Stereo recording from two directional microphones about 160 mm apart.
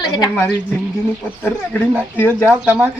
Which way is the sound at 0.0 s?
25° left (ahead or behind).